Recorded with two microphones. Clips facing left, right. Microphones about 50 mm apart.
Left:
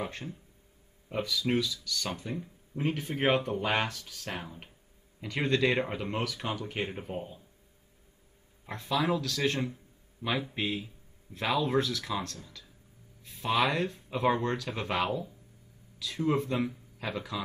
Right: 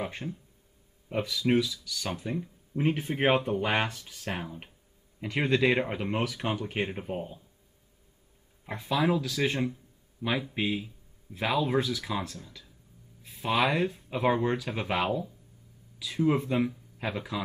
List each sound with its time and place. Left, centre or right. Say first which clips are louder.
0.0 s speech: right 2 dB; centre
1.2 s speech: right 3 dB; centre
3.8 s speech: right 2 dB; centre
8.6 s speech: right 2 dB; centre